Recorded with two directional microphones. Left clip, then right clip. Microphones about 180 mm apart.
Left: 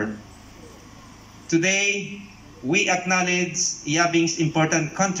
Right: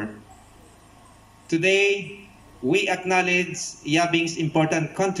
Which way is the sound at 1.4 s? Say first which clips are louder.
Right 1 dB; 20° right (ahead or behind).